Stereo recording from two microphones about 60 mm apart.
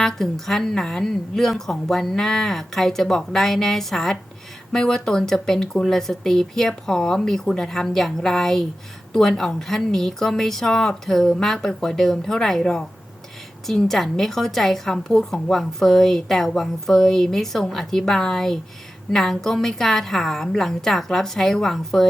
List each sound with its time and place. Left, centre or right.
0.0 s a woman's voice: centre